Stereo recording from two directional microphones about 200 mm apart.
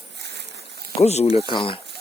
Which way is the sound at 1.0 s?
30° left (ahead or behind).